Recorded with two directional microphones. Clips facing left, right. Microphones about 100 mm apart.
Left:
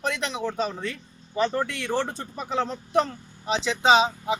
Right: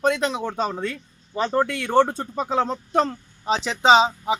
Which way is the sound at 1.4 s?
35° right (ahead or behind).